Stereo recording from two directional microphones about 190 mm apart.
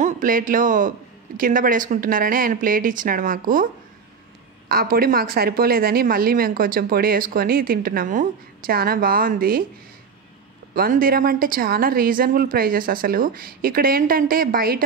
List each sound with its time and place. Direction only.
0.0 s a woman's voice: 45° right (ahead or behind)
4.6 s a woman's voice: 50° right (ahead or behind)
10.7 s a woman's voice: 50° right (ahead or behind)